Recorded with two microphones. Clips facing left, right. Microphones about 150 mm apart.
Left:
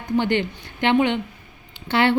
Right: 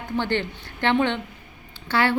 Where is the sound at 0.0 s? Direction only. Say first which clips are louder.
Left 4 dB; 15° left (ahead or behind).